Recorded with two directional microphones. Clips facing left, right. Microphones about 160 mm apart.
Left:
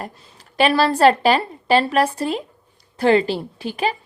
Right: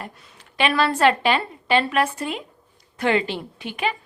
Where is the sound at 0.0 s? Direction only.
40° left (ahead or behind).